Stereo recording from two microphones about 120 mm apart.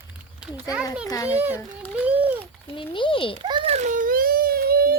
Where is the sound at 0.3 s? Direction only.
10° right (ahead or behind).